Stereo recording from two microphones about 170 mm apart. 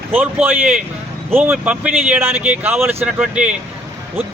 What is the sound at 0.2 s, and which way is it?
Speech, 5° right (ahead or behind).